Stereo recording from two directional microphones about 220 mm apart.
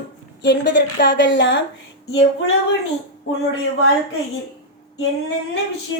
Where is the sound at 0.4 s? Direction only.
50° left (ahead or behind).